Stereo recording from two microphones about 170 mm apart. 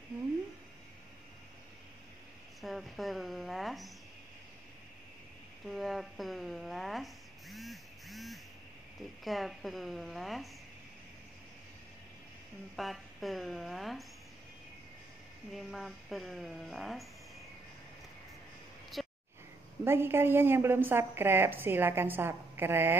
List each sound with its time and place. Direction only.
2.6 s speech: centre (ahead or behind)
5.7 s rub: centre (ahead or behind)
9.2 s speech: centre (ahead or behind)
12.7 s speech: centre (ahead or behind)
15.5 s speech: centre (ahead or behind)
18.9 s a sound: centre (ahead or behind)
19.8 s a woman's voice: 15° right (ahead or behind)